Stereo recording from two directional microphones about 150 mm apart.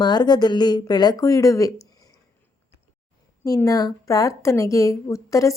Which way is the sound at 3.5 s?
25° left (ahead or behind).